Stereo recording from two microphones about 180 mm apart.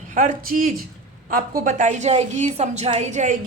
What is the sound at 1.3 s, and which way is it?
A woman's voice, 50° right (ahead or behind).